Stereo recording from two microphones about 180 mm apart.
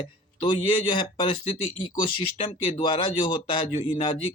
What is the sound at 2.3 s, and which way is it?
Speech, 30° left (ahead or behind).